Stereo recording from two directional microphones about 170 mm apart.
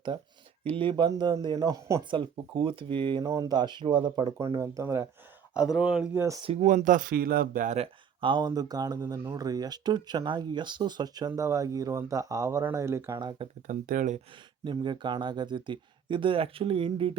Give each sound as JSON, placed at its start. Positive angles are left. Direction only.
{"t": 0.6, "sound": "speech", "side_deg": -30}
{"t": 4.4, "sound": "speech", "side_deg": -15}
{"t": 5.5, "sound": "speech", "side_deg": -5}
{"t": 6.4, "sound": "speech", "side_deg": -35}
{"t": 6.7, "sound": "speech", "side_deg": -50}
{"t": 7.8, "sound": "speech", "side_deg": -30}
{"t": 13.7, "sound": "speech", "side_deg": -50}
{"t": 14.6, "sound": "speech", "side_deg": -25}